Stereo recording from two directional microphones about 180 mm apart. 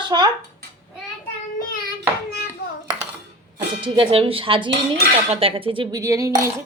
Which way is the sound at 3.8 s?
30° right (ahead or behind).